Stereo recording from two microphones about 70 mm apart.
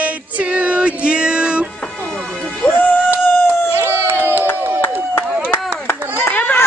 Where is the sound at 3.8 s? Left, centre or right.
Right.